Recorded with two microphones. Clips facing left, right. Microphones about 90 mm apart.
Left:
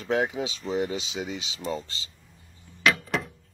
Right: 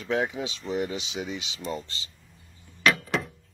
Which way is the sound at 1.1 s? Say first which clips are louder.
Even; 35° left (ahead or behind).